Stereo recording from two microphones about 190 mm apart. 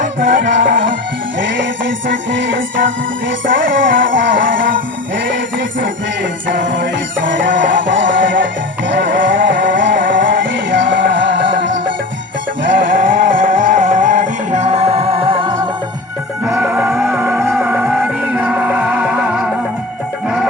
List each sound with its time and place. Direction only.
0.0 s music: 45° right (ahead or behind)
1.4 s music: 75° right (ahead or behind)
6.6 s music: 75° right (ahead or behind)
9.1 s vehicle: 75° right (ahead or behind)
9.6 s music: 75° right (ahead or behind)
12.7 s music: 45° right (ahead or behind); by 15.5 s 25° right (ahead or behind)
16.5 s music: 10° right (ahead or behind)